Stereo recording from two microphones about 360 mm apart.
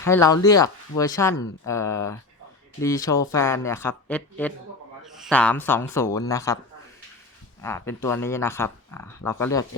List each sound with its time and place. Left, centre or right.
0.0 s a man's voice: centre
7.6 s speech: centre